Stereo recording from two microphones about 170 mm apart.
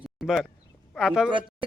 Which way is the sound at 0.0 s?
Centre (ahead or behind).